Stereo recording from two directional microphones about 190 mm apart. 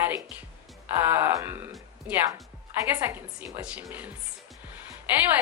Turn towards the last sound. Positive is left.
turn(degrees=-10)  # may be behind; listen again after turning